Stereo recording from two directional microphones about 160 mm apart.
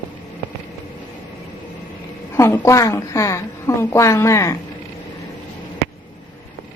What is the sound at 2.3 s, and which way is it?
A woman's voice, 15° left (ahead or behind).